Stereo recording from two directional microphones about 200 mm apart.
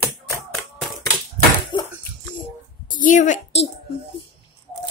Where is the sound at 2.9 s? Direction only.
40° left (ahead or behind).